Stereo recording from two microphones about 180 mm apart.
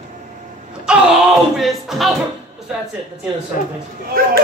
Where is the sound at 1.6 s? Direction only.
Centre (ahead or behind).